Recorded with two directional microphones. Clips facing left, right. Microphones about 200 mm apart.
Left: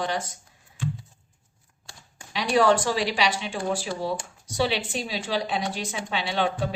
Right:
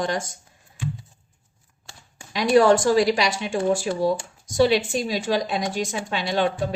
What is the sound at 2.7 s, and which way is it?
A woman's voice, 45° right (ahead or behind).